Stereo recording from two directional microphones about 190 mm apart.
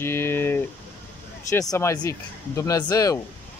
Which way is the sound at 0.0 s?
10° left (ahead or behind).